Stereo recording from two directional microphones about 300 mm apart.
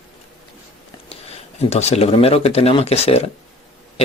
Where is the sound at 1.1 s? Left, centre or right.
Left.